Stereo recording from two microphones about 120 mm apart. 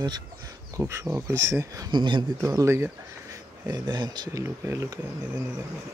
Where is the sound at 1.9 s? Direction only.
40° right (ahead or behind).